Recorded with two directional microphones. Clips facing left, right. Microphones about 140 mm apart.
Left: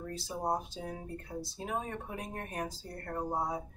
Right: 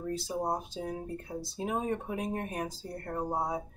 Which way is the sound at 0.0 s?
20° right (ahead or behind).